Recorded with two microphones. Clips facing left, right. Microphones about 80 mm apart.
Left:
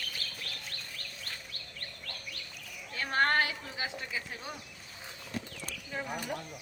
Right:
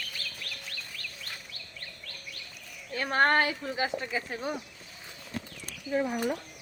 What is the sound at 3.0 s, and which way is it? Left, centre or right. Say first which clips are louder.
Speech: right 4 dB; right.